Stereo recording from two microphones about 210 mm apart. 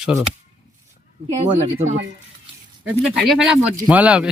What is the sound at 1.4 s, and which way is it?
Speech, 30° right (ahead or behind).